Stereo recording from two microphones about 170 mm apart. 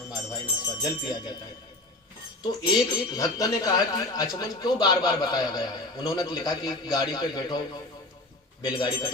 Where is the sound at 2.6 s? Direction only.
20° left (ahead or behind).